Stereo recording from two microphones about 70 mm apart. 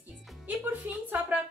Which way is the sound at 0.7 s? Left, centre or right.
Right.